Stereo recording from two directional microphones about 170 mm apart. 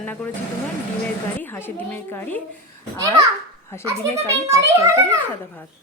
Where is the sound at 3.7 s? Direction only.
15° left (ahead or behind).